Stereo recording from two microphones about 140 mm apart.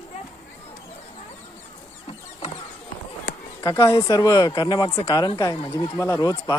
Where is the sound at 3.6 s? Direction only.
20° left (ahead or behind).